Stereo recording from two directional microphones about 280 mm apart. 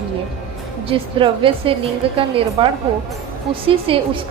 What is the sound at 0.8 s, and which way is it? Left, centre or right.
A woman's voice, centre.